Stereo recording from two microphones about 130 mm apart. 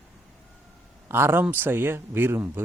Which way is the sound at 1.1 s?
20° right (ahead or behind).